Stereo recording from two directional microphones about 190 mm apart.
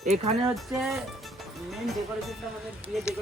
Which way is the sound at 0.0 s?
35° right (ahead or behind).